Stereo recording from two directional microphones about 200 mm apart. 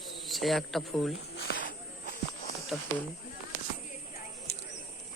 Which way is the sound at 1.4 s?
50° left (ahead or behind).